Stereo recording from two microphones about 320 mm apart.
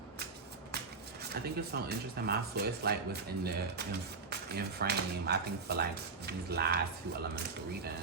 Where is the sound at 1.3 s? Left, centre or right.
Right.